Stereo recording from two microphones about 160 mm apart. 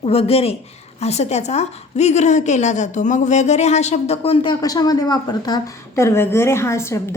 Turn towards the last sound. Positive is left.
turn(degrees=15)  # may be behind; listen again after turning